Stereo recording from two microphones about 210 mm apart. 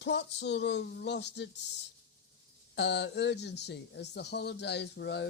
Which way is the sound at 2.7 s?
55° left (ahead or behind).